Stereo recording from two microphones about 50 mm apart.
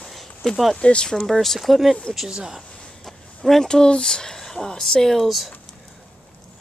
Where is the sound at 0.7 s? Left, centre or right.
Centre.